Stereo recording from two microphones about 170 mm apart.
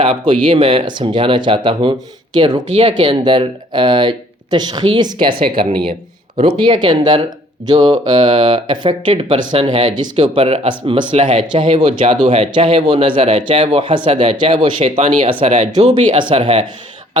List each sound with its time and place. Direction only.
0.0 s speech: 30° right (ahead or behind)
15.4 s speech: 45° right (ahead or behind)
16.0 s speech: 25° right (ahead or behind)